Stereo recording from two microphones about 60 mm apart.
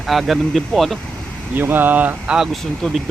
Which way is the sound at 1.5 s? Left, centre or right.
Right.